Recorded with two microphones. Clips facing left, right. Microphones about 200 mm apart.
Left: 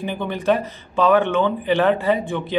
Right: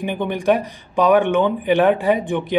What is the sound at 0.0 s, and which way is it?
A man's voice, 15° right (ahead or behind).